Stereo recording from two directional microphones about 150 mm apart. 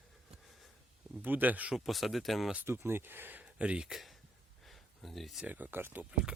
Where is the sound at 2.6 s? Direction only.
15° right (ahead or behind).